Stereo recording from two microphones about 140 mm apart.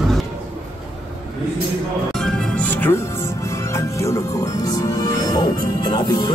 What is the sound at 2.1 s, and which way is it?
Music, centre (ahead or behind).